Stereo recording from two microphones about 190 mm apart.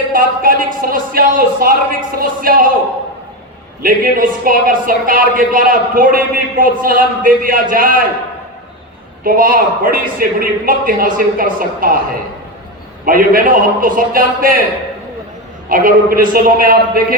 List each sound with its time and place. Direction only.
0.1 s speech: 45° right (ahead or behind)
3.8 s speech: 50° right (ahead or behind)
9.2 s speech: 50° right (ahead or behind)
13.1 s speech: 50° right (ahead or behind)
15.7 s speech: 50° right (ahead or behind)